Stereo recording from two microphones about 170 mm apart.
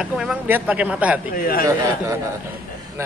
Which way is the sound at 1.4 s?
60° left (ahead or behind).